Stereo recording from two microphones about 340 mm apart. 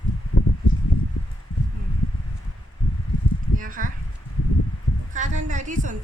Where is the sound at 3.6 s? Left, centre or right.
Right.